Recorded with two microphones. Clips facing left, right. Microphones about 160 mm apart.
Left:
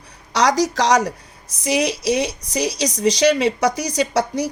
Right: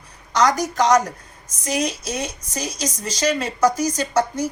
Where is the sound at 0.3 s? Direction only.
80° left.